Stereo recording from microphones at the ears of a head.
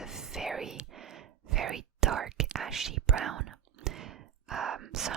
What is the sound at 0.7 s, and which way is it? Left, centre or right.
Whispering, right.